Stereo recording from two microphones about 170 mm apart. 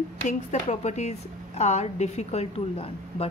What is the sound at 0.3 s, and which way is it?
A woman's voice, 45° left (ahead or behind).